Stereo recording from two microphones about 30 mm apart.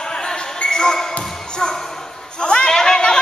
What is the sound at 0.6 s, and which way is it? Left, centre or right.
Basketball bounce, left.